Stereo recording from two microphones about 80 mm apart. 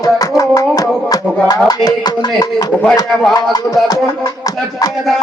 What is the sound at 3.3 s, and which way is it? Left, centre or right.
Music, left.